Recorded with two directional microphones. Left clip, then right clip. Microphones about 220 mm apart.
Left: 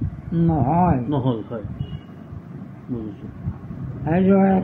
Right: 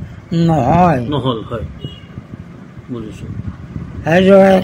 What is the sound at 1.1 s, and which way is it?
Speech, 15° right (ahead or behind).